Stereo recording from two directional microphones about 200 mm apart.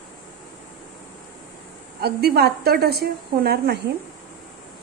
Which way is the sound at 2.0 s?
50° right (ahead or behind).